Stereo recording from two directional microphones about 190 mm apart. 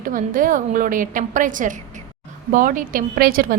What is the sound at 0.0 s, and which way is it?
Speech, 45° right (ahead or behind).